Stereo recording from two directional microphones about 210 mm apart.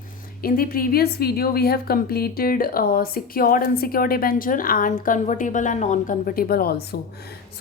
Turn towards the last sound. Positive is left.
turn(degrees=45)  # may be behind; listen again after turning